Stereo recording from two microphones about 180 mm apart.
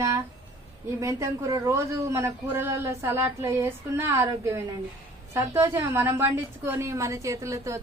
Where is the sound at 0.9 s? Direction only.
15° right (ahead or behind).